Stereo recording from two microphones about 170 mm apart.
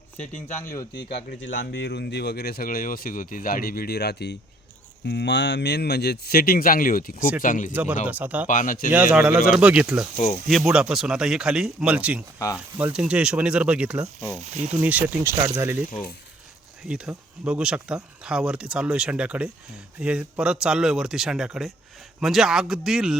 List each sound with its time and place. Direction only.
0.6 s a man's voice: 20° left (ahead or behind)
1.1 s speech: 80° left
5.0 s speech: 90° left; by 7.7 s 50° left (ahead or behind)
7.7 s speech: 10° right (ahead or behind)
8.4 s speech: 50° left (ahead or behind)
8.9 s speech: 5° right (ahead or behind)
14.4 s speech: 45° right (ahead or behind)
14.8 s speech: 10° right (ahead or behind)
16.9 s speech: 5° right (ahead or behind)